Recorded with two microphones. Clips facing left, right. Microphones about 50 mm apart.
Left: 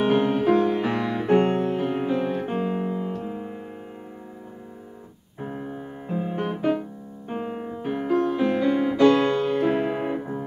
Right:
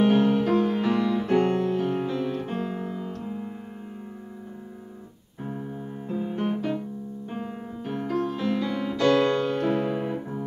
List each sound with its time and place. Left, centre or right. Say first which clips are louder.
0.0 s music: even; left
3.2 s keyboard: left 2 dB; left
5.4 s music: left 1 dB; left
7.2 s piano: left 8 dB; left
7.9 s music: left 5 dB; centre